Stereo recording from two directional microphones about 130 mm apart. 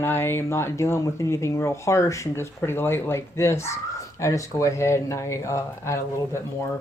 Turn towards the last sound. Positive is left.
turn(degrees=20)  # may be behind; listen again after turning